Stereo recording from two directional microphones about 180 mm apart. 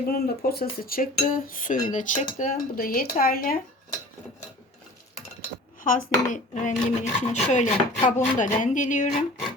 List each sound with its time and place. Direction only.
0.1 s dishes: 55° left (ahead or behind)
5.8 s dishes: 45° left (ahead or behind)